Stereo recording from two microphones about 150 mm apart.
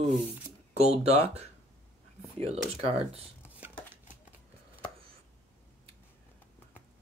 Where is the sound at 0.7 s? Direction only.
45° right (ahead or behind).